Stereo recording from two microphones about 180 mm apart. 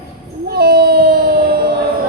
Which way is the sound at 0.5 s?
60° right (ahead or behind).